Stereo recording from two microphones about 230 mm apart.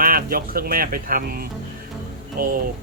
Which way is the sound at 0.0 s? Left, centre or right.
Right.